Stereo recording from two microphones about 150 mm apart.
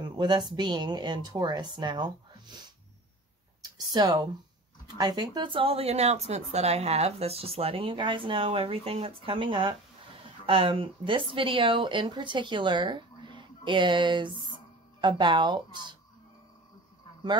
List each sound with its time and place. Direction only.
0.0 s speech: 30° right (ahead or behind)
3.7 s speech: 25° right (ahead or behind)